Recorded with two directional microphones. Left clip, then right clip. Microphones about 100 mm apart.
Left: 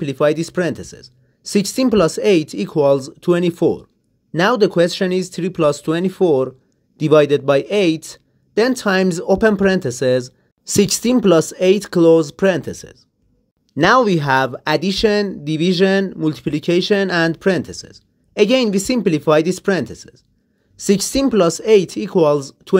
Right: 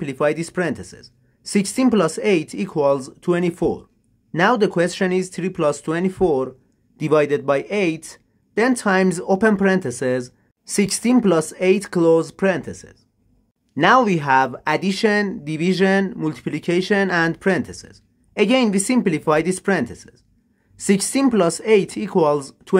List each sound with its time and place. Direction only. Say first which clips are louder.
0.0 s speech: left 4 dB; 30° left (ahead or behind)
10.6 s speech: left 5 dB; 45° left (ahead or behind)
13.7 s speech: left 2 dB; 35° left (ahead or behind)
20.7 s speech: left 3 dB; 20° left (ahead or behind)